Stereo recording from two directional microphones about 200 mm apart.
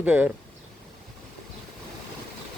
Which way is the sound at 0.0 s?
10° right (ahead or behind).